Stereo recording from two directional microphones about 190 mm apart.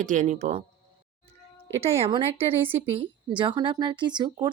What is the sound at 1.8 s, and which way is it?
A woman's voice, 30° right (ahead or behind).